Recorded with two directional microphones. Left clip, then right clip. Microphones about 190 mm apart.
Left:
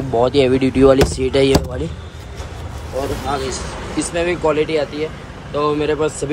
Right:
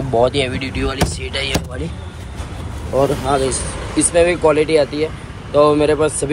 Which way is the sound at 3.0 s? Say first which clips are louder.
Right 6 dB; centre (ahead or behind).